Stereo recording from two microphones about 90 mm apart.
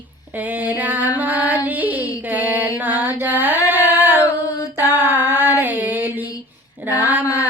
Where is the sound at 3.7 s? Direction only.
20° right (ahead or behind).